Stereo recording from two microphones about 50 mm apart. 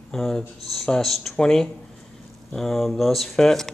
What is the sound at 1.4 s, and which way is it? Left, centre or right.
Speech, centre.